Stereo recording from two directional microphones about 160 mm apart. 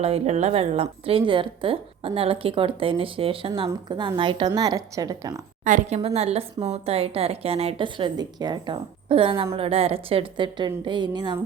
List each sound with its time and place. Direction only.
0.0 s a woman's voice: 40° right (ahead or behind); by 5.4 s 25° right (ahead or behind)
5.6 s a woman's voice: 55° right (ahead or behind)
6.1 s a woman's voice: 40° right (ahead or behind)